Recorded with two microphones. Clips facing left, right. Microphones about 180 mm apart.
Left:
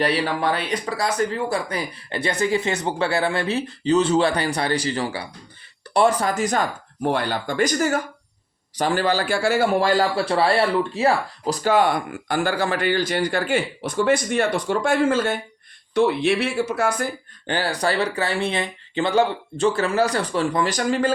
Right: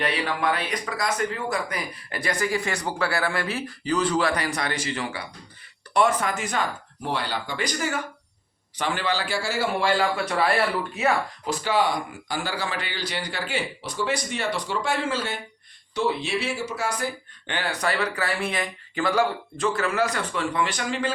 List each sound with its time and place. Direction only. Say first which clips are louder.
0.0 s speech: left 4 dB; 35° left (ahead or behind); by 9.6 s 55° left (ahead or behind)
9.8 s speech: left 4 dB; 40° left (ahead or behind); by 17.1 s 55° left (ahead or behind)
17.4 s speech: left 4 dB; 35° left (ahead or behind)